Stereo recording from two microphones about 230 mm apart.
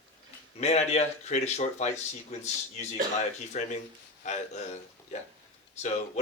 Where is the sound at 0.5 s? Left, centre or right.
Left.